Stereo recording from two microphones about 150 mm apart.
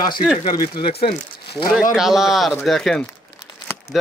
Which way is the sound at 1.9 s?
Centre (ahead or behind).